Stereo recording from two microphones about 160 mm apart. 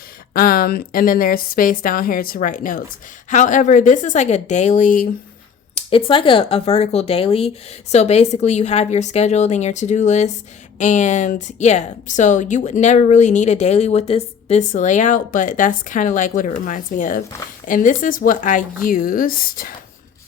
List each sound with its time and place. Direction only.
0.3 s a woman's voice: 65° left (ahead or behind)
5.7 s a woman's voice: 35° left (ahead or behind); by 19.7 s 60° left (ahead or behind)